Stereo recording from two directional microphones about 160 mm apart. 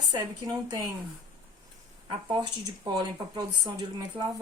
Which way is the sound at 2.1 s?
30° right (ahead or behind).